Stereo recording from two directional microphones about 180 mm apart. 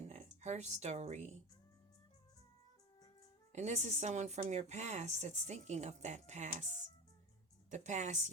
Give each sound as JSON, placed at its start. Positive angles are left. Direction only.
{"t": 0.0, "sound": "speech", "side_deg": -40}
{"t": 3.5, "sound": "speech", "side_deg": -40}
{"t": 7.7, "sound": "speech", "side_deg": -40}